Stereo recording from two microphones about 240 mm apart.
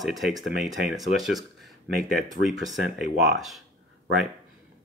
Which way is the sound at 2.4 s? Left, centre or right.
Centre.